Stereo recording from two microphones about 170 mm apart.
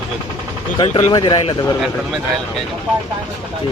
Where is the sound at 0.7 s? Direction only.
30° left (ahead or behind).